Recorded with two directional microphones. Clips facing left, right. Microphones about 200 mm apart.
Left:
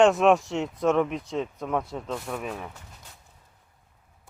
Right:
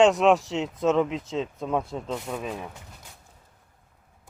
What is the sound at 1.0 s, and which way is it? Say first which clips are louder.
Speech: right 1 dB; 20° right (ahead or behind).